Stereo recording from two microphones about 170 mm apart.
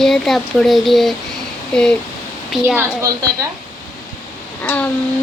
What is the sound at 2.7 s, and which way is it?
Speech, 20° right (ahead or behind).